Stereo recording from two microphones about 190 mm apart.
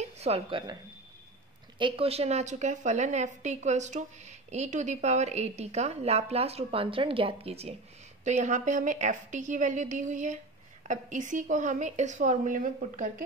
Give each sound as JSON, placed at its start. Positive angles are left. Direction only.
{"t": 0.0, "sound": "speech", "side_deg": -35}
{"t": 1.8, "sound": "a woman's voice", "side_deg": -30}